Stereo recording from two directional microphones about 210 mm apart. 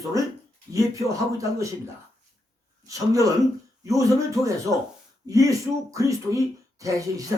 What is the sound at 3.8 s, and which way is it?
Speech, 15° right (ahead or behind).